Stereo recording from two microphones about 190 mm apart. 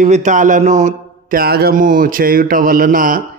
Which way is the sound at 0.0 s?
40° right (ahead or behind).